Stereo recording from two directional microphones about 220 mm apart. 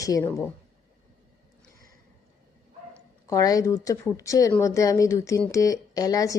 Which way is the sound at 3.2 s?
15° left (ahead or behind).